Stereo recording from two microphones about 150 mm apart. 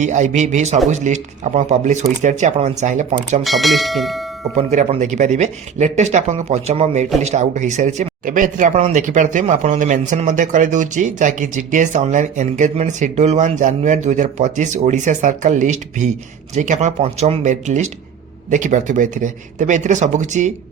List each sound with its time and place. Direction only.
0.0 s speech: 55° right (ahead or behind)
3.4 s speech: centre (ahead or behind)
4.5 s speech: 50° right (ahead or behind)